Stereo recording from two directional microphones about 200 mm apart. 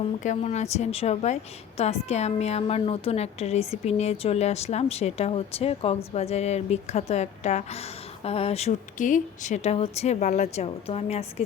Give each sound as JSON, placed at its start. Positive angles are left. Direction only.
{"t": 0.2, "sound": "a woman's voice", "side_deg": 35}